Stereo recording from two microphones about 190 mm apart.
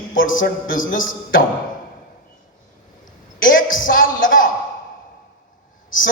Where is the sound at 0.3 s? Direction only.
45° left (ahead or behind).